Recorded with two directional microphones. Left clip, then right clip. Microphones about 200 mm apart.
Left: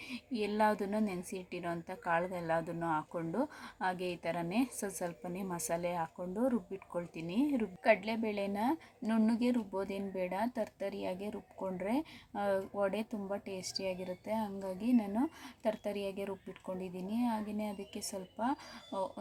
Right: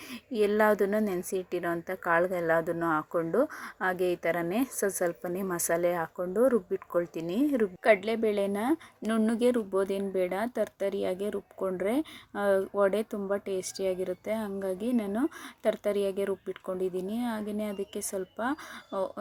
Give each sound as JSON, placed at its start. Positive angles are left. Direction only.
{"t": 0.1, "sound": "a woman's voice", "side_deg": -20}